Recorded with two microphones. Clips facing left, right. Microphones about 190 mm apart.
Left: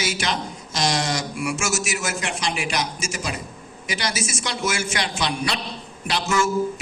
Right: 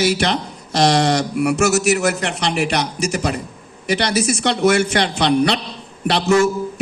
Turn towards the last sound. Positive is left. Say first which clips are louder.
# right 8 dB
turn(degrees=-65)  # may be behind; listen again after turning